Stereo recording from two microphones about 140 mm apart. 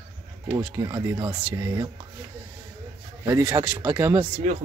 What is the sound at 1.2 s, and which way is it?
Speech, 20° right (ahead or behind).